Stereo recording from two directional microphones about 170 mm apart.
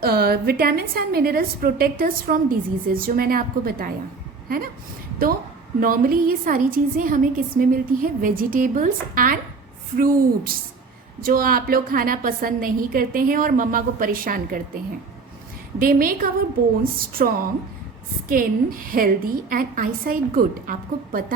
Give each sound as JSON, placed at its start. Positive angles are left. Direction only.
{"t": 0.0, "sound": "a woman's voice", "side_deg": -65}
{"t": 5.8, "sound": "a woman's voice", "side_deg": -55}
{"t": 15.8, "sound": "a woman's voice", "side_deg": -55}
{"t": 18.3, "sound": "a woman's voice", "side_deg": -55}